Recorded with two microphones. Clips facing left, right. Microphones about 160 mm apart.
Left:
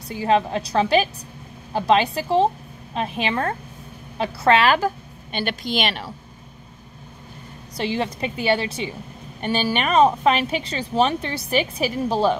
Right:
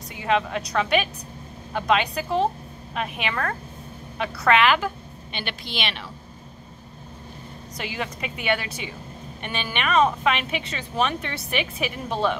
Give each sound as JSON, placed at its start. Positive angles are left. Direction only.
{"t": 0.1, "sound": "a woman's voice", "side_deg": 30}
{"t": 7.7, "sound": "a woman's voice", "side_deg": 30}